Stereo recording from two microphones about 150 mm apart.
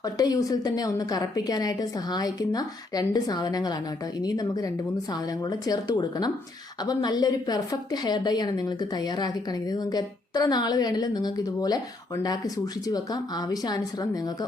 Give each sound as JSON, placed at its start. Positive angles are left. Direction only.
{"t": 0.0, "sound": "a woman's voice", "side_deg": 25}